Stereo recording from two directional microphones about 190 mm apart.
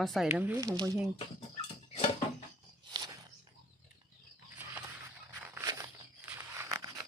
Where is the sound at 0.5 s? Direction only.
20° right (ahead or behind).